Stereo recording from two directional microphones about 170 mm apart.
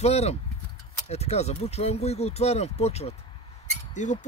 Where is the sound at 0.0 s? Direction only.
40° left (ahead or behind).